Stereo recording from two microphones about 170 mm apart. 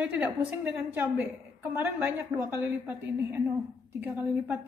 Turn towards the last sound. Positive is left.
turn(degrees=-10)  # may be behind; listen again after turning